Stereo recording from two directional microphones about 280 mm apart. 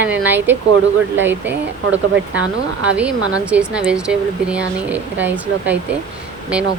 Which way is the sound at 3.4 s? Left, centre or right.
Centre.